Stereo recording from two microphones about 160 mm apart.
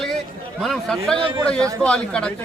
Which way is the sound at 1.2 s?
30° right (ahead or behind).